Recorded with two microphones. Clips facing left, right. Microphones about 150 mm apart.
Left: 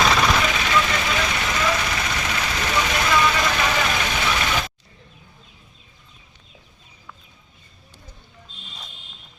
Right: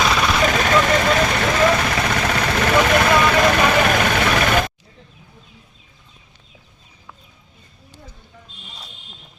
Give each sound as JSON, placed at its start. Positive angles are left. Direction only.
{"t": 0.4, "sound": "vehicle", "side_deg": -50}